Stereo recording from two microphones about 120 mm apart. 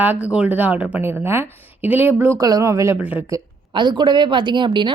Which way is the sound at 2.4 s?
30° right (ahead or behind).